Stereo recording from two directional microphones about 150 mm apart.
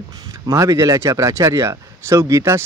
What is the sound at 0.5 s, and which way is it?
Speech, 20° right (ahead or behind).